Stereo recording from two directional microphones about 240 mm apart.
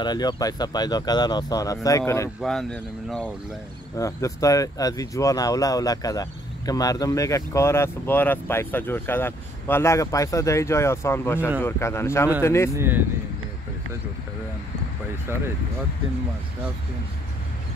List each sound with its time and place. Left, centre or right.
0.0 s speech: centre
12.7 s speech: centre